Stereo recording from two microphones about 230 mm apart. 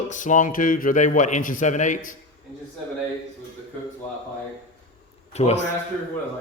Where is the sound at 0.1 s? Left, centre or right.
Left.